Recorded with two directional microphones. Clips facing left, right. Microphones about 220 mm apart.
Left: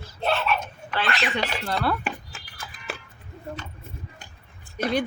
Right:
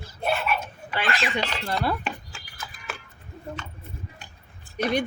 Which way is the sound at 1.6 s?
15° right (ahead or behind).